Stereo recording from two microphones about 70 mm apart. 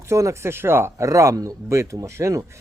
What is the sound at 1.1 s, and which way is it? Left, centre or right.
Speech, right.